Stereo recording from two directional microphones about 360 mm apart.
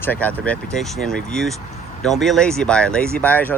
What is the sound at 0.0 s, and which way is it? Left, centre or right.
Speech, centre.